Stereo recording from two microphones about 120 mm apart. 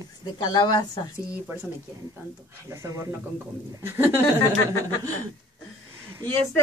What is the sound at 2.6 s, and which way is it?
Speech, 25° right (ahead or behind).